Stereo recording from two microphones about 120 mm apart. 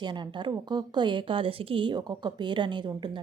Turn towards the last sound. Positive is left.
turn(degrees=-40)  # may be behind; listen again after turning